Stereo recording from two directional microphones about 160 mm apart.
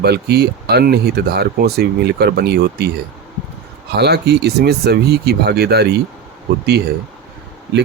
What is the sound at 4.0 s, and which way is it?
Speech, 90° right.